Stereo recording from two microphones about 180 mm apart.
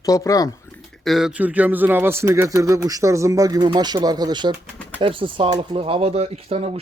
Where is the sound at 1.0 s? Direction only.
Centre (ahead or behind).